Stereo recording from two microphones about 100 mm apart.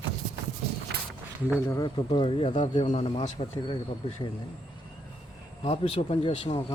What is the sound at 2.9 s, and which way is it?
Speech, 75° left (ahead or behind).